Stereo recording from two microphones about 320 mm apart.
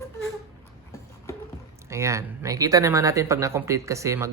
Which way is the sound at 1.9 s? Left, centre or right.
Centre.